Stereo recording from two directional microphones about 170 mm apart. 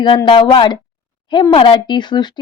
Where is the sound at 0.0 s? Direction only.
25° left (ahead or behind).